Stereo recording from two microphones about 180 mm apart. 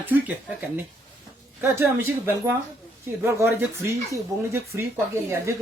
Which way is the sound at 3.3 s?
15° right (ahead or behind).